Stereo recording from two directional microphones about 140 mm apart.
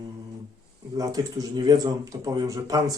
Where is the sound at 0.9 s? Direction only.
25° right (ahead or behind).